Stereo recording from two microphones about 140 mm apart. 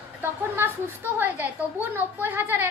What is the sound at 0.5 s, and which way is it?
A woman's voice, 15° right (ahead or behind).